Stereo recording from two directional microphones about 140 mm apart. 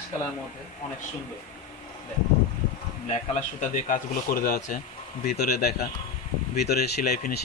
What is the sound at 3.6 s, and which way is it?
Speech, 75° left (ahead or behind).